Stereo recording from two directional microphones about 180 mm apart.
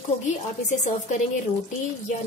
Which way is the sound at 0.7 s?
40° left (ahead or behind).